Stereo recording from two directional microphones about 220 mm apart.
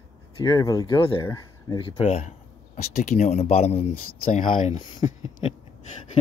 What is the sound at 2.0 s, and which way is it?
Speech, 30° left (ahead or behind).